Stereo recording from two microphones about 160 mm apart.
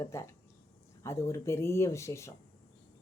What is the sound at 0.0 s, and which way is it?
Speech, 20° left (ahead or behind).